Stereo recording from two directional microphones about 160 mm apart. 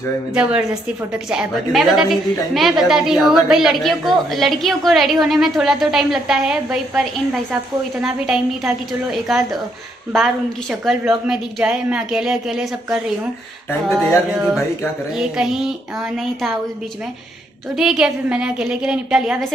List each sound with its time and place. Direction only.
0.3 s a woman's voice: 5° right (ahead or behind)
15.1 s a woman's voice: 5° right (ahead or behind)
17.7 s a woman's voice: 5° right (ahead or behind)